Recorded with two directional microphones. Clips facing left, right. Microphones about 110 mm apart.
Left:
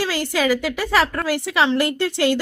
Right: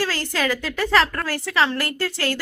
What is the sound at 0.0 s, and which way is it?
A woman's voice, 15° left (ahead or behind).